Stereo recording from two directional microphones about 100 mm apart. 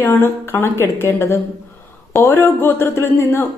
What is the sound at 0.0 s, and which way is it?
A woman's voice, 25° left (ahead or behind).